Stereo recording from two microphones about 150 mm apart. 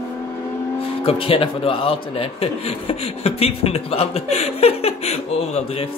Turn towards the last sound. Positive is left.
turn(degrees=45)  # may be behind; listen again after turning